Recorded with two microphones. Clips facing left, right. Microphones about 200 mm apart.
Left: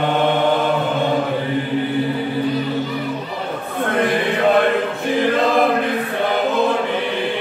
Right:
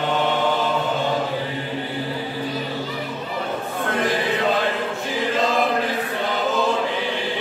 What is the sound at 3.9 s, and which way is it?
Chant, 55° left (ahead or behind).